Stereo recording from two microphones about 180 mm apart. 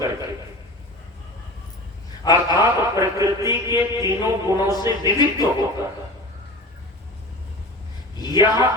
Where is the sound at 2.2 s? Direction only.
20° left (ahead or behind).